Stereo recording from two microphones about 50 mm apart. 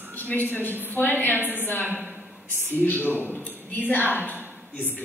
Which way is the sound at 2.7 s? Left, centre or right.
Left.